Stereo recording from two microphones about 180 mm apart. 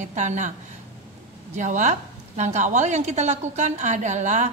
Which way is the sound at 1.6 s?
45° right (ahead or behind).